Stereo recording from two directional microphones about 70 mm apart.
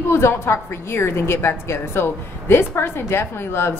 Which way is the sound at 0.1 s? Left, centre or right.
Left.